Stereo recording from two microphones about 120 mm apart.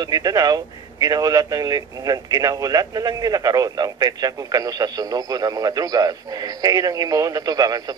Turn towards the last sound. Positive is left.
turn(degrees=-30)  # may be behind; listen again after turning